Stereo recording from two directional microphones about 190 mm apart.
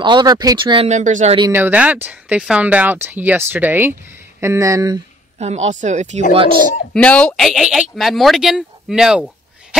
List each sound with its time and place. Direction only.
0.0 s speech: 25° right (ahead or behind)
0.8 s speech: 40° right (ahead or behind)
1.5 s speech: 10° right (ahead or behind)
5.4 s speech: 35° right (ahead or behind)
6.9 s speech: 5° left (ahead or behind)